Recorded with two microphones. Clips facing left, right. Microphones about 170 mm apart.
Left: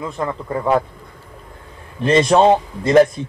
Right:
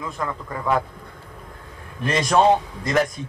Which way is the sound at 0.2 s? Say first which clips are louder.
Left 7 dB; 30° left (ahead or behind).